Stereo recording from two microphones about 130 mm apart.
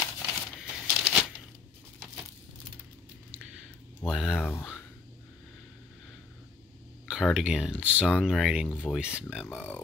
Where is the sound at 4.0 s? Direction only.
5° right (ahead or behind).